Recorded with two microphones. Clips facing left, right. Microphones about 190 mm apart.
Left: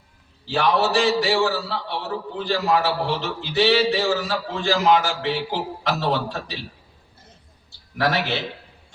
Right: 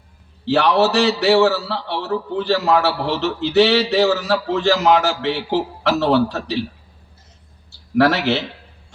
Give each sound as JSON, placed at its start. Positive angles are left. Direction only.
{"t": 0.4, "sound": "a man's voice", "side_deg": -70}
{"t": 7.9, "sound": "a man's voice", "side_deg": -70}